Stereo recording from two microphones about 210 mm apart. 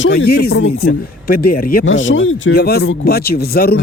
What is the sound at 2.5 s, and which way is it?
Speech, 45° left (ahead or behind).